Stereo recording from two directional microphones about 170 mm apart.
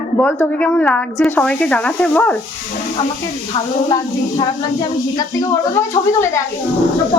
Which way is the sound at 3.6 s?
30° left (ahead or behind).